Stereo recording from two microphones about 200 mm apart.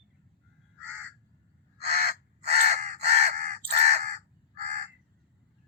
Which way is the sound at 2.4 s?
35° right (ahead or behind).